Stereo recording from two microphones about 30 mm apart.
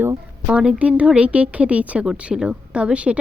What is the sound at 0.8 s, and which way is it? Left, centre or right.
A woman's voice, right.